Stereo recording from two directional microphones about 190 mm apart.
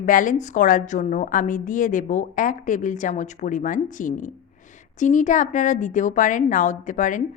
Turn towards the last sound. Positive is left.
turn(degrees=40)  # may be behind; listen again after turning